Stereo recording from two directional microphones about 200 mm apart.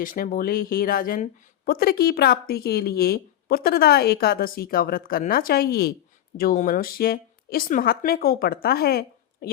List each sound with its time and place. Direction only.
0.0 s a woman's voice: 45° left (ahead or behind)